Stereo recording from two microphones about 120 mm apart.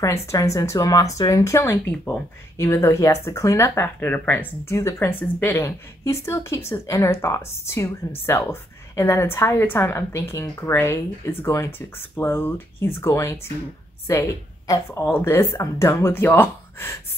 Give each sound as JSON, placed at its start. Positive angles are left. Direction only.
{"t": 0.0, "sound": "a woman's voice", "side_deg": 25}
{"t": 14.9, "sound": "a woman's voice", "side_deg": 20}